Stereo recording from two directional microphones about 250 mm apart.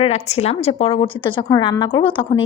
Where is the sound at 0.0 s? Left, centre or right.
Left.